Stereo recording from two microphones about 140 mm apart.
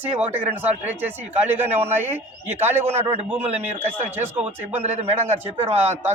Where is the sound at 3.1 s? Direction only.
45° right (ahead or behind).